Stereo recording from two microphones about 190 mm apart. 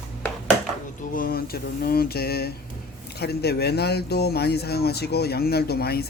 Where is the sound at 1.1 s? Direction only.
50° left (ahead or behind).